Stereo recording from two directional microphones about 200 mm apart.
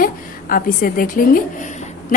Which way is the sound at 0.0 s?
45° left (ahead or behind).